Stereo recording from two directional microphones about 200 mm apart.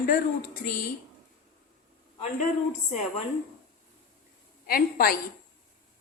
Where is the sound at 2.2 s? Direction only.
35° left (ahead or behind).